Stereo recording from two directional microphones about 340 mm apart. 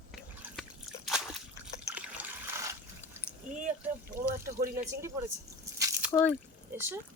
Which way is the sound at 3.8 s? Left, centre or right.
Centre.